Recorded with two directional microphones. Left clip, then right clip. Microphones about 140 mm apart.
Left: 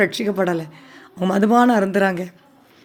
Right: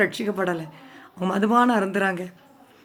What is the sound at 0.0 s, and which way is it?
A woman's voice, 30° left (ahead or behind).